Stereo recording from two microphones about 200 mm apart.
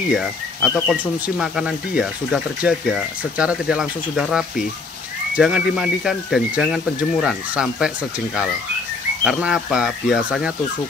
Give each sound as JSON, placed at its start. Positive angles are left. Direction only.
{"t": 0.1, "sound": "speech", "side_deg": 0}
{"t": 9.2, "sound": "speech", "side_deg": 0}